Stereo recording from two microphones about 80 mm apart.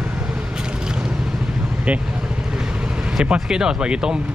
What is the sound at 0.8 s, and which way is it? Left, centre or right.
Vehicle, centre.